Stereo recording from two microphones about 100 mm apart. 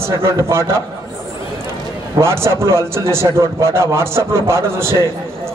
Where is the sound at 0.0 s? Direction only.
30° right (ahead or behind).